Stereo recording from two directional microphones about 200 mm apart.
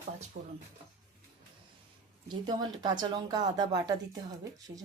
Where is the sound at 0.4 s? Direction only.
50° right (ahead or behind).